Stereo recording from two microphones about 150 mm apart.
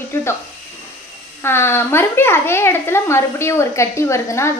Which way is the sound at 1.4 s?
15° left (ahead or behind).